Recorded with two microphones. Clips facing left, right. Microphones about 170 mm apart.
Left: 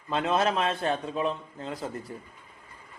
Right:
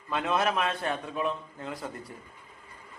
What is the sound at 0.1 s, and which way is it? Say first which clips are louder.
A man's voice: left 2 dB; 25° left (ahead or behind).